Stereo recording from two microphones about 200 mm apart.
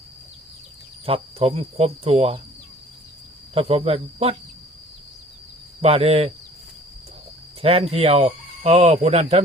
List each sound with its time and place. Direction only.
1.0 s speech: 30° right (ahead or behind)
3.5 s speech: 30° right (ahead or behind)
5.8 s speech: 30° right (ahead or behind)
7.6 s speech: 30° right (ahead or behind)